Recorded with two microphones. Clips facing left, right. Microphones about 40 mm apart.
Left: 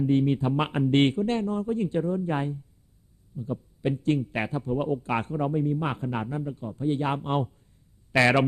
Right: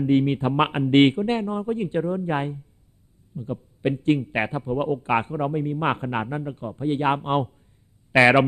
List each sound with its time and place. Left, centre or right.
0.0 s a man's voice: right